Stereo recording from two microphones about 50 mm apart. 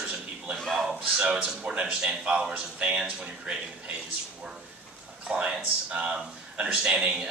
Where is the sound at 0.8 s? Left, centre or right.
Centre.